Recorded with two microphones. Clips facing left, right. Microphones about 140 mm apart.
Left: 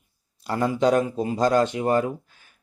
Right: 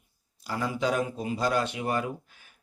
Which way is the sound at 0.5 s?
40° left (ahead or behind).